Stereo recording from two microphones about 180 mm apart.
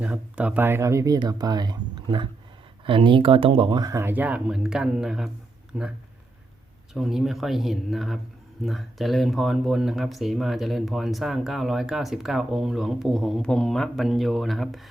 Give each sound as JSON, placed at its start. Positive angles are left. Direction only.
{"t": 0.0, "sound": "speech", "side_deg": -10}
{"t": 6.9, "sound": "speech", "side_deg": 0}